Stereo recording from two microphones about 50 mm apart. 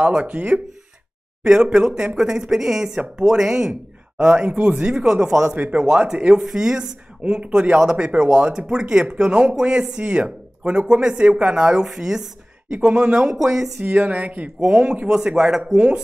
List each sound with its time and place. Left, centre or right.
0.0 s a woman's voice: right
1.4 s speech: centre
12.6 s speech: right
13.3 s speech: centre
13.8 s a woman's voice: right
15.0 s speech: centre